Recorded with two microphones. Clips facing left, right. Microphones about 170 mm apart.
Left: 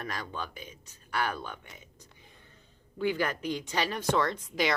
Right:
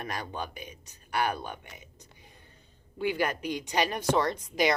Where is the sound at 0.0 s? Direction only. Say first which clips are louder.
Right 2 dB; 15° right (ahead or behind).